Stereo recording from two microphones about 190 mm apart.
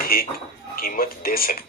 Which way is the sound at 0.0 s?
50° left (ahead or behind).